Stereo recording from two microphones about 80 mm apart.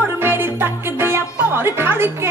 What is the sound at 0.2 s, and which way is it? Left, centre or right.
Music, right.